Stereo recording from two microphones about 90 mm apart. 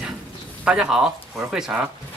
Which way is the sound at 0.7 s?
10° right (ahead or behind).